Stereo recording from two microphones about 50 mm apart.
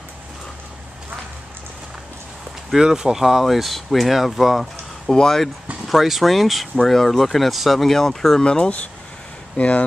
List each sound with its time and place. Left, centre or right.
2.7 s speech: centre
5.0 s speech: centre
5.9 s speech: centre
8.5 s speech: centre